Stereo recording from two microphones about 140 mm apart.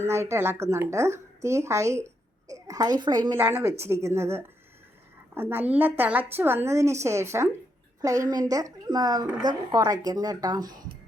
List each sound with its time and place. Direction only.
0.0 s a woman's voice: 20° right (ahead or behind)
3.3 s a woman's voice: 15° right (ahead or behind)